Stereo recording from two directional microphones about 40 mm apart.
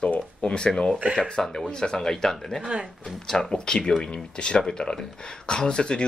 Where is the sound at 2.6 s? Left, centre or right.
Right.